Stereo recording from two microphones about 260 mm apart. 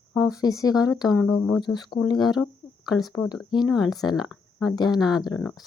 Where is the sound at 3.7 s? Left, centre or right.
Centre.